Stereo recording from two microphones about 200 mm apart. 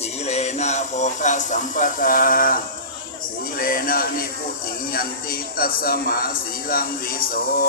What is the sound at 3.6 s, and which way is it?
Speech, 45° left (ahead or behind).